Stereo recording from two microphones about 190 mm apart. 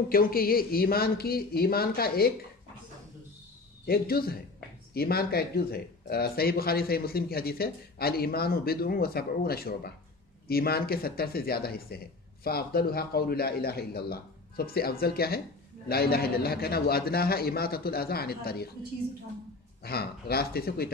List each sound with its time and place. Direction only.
0.1 s speech: 50° left (ahead or behind)
3.8 s a man's voice: 55° left (ahead or behind)
19.8 s a man's voice: 55° left (ahead or behind)